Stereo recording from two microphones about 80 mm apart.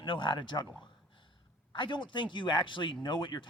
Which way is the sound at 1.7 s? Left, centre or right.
Left.